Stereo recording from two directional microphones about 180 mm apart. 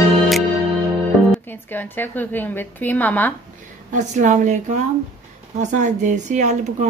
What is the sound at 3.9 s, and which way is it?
A woman's voice, 45° right (ahead or behind).